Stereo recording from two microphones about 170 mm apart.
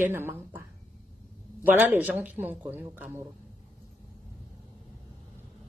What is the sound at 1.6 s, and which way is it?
A woman's voice, 10° right (ahead or behind).